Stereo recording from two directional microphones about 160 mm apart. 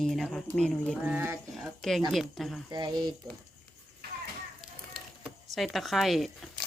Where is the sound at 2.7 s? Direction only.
25° right (ahead or behind).